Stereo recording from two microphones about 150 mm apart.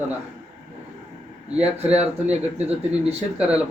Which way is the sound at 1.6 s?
45° right (ahead or behind).